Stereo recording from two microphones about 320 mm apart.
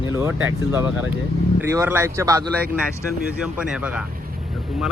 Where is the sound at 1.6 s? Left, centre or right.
Centre.